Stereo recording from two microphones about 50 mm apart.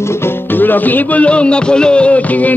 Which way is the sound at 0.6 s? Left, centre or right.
Left.